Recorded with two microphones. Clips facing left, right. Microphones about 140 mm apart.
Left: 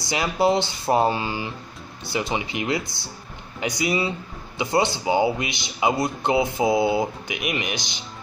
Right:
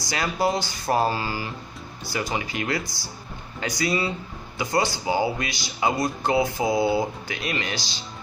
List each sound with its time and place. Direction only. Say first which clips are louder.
0.1 s speech: left 4 dB; 20° left (ahead or behind)